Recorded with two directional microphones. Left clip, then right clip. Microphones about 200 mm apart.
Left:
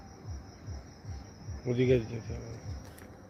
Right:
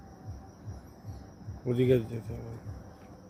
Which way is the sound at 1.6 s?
15° right (ahead or behind).